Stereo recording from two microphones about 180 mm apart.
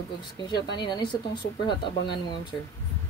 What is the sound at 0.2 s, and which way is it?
Speech, 25° left (ahead or behind).